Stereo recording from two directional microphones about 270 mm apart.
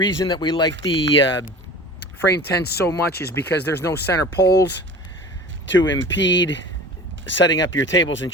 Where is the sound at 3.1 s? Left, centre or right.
Left.